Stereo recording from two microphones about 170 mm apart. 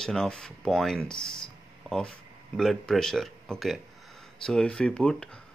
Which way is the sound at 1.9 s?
5° left (ahead or behind).